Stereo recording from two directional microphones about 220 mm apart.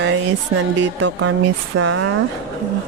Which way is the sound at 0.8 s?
55° right (ahead or behind).